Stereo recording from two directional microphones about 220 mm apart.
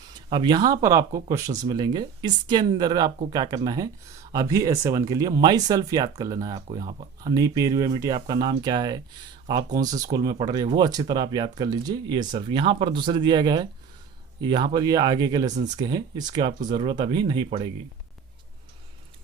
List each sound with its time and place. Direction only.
0.1 s speech: 20° right (ahead or behind)